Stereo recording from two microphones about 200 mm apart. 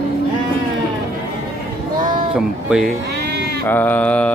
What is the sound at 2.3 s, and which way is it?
Speech, centre (ahead or behind).